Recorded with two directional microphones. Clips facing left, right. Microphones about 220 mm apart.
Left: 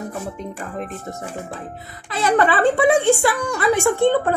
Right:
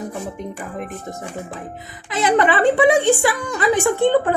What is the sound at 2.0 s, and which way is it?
A woman's voice, 20° right (ahead or behind).